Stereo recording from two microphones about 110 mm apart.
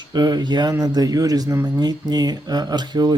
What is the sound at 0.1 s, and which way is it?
Speech, 40° right (ahead or behind).